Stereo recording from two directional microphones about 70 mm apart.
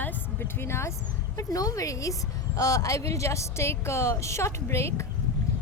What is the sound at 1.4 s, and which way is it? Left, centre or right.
A woman's voice, left.